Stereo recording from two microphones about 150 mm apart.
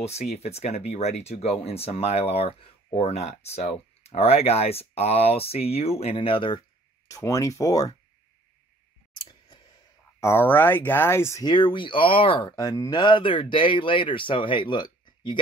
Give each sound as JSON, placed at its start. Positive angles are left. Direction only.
{"t": 0.0, "sound": "speech", "side_deg": 45}
{"t": 7.1, "sound": "speech", "side_deg": 20}
{"t": 9.1, "sound": "a sound", "side_deg": 30}
{"t": 10.2, "sound": "speech", "side_deg": 15}
{"t": 11.4, "sound": "speech", "side_deg": 35}